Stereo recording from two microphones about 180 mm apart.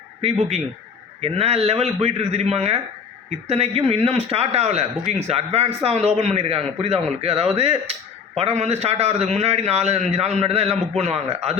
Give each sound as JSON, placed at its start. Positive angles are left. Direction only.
{"t": 0.2, "sound": "speech", "side_deg": -35}